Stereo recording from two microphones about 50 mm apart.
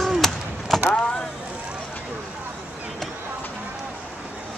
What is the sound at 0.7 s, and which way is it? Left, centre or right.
Vehicle, centre.